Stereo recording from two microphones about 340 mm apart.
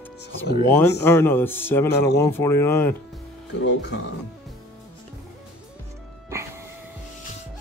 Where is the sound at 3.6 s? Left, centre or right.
Left.